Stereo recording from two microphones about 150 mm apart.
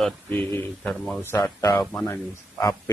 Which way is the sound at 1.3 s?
25° left (ahead or behind).